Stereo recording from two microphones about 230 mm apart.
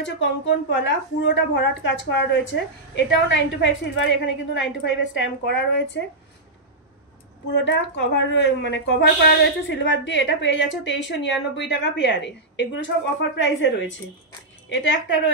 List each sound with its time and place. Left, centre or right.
0.0 s speech: left
7.5 s speech: left